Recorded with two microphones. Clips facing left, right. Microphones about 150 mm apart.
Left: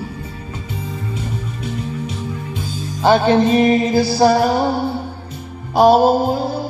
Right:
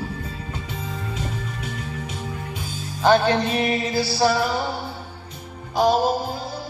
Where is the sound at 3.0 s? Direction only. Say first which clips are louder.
Left 5 dB; 15° left (ahead or behind).